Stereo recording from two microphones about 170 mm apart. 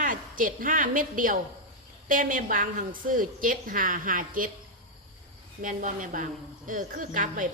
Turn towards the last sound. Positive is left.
turn(degrees=-50)  # may be behind; listen again after turning